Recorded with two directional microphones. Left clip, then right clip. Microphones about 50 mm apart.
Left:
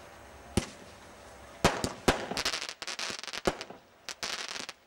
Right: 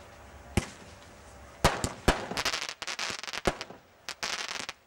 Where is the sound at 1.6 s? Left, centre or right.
Right.